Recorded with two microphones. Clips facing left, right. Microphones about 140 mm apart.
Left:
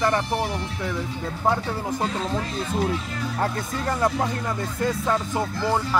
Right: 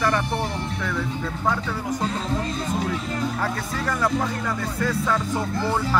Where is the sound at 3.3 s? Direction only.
30° left (ahead or behind).